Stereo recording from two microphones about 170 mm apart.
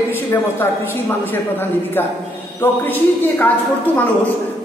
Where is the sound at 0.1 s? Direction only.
10° left (ahead or behind).